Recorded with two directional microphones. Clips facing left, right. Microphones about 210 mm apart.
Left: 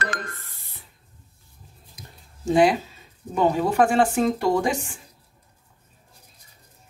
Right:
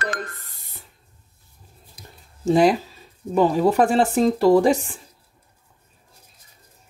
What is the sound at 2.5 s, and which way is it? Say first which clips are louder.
Speech: right 2 dB; 40° right (ahead or behind).